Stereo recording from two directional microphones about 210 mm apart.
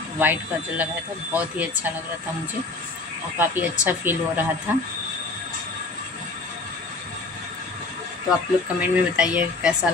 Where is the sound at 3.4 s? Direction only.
10° right (ahead or behind).